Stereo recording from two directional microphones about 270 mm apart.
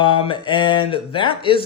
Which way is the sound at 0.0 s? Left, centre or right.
Centre.